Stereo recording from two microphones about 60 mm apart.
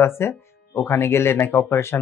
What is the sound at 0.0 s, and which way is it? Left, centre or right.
Speech, left.